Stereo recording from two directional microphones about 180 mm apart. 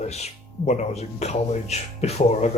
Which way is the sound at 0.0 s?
40° left (ahead or behind).